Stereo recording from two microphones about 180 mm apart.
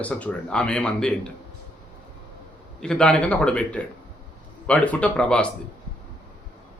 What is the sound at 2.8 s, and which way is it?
Speech, 5° left (ahead or behind).